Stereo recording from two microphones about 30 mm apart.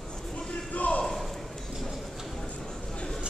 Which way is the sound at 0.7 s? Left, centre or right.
Left.